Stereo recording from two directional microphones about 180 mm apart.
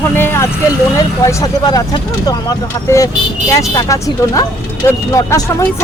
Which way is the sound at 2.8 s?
15° left (ahead or behind).